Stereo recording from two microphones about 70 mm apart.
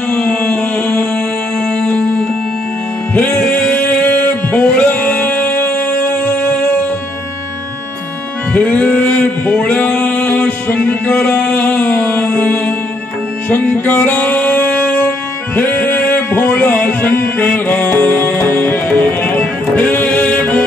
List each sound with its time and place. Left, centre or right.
0.1 s music: centre
8.5 s male singing: left
13.5 s music: left